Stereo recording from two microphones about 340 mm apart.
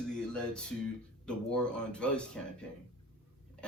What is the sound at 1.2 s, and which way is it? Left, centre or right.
A man's voice, centre.